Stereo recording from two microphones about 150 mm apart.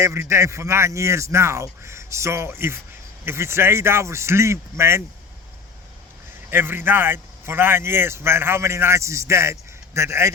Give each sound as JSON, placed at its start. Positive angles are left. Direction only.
{"t": 0.0, "sound": "a man's voice", "side_deg": -20}
{"t": 6.5, "sound": "a man's voice", "side_deg": -15}